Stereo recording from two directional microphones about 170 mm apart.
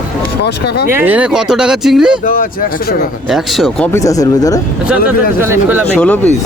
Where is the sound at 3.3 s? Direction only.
Centre (ahead or behind).